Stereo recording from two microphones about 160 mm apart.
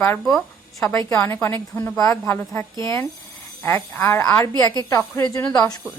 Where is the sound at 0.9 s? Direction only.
15° left (ahead or behind).